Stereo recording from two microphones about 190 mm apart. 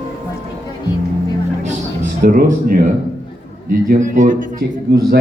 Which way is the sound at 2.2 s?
45° right (ahead or behind).